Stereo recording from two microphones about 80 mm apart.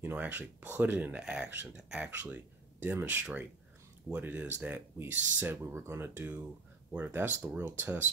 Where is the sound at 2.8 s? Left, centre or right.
Right.